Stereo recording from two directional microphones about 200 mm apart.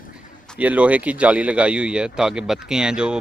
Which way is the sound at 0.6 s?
5° right (ahead or behind).